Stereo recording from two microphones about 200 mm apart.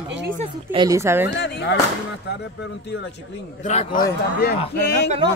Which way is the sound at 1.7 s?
60° left (ahead or behind).